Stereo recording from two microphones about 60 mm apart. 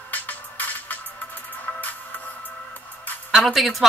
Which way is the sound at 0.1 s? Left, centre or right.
Left.